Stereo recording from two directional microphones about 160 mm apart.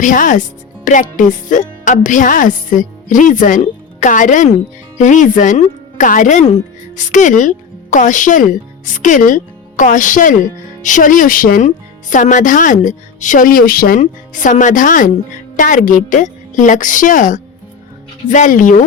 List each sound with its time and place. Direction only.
0.0 s a woman's voice: 55° left (ahead or behind)
14.0 s a woman's voice: 50° left (ahead or behind)